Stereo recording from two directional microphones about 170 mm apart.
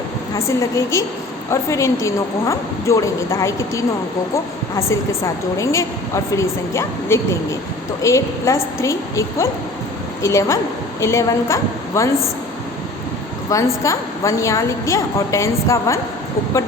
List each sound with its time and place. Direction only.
0.3 s a woman's voice: 15° left (ahead or behind)
13.5 s a woman's voice: 20° left (ahead or behind)